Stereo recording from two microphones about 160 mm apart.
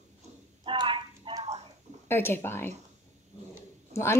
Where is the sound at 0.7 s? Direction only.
30° right (ahead or behind).